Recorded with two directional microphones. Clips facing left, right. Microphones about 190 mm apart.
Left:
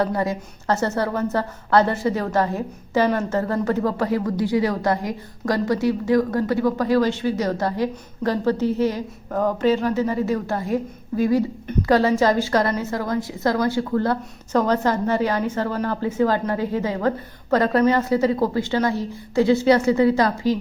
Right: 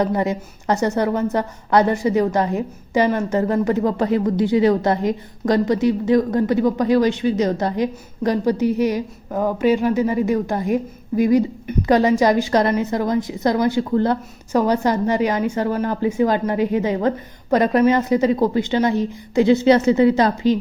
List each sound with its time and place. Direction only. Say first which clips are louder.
0.0 s a woman's voice: right 2 dB; 20° right (ahead or behind)